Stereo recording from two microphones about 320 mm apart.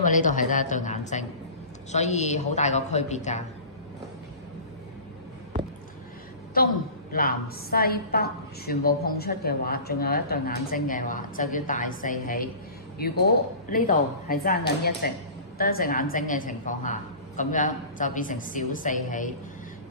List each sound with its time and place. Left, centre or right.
0.0 s a woman's voice: left
7.1 s a woman's voice: left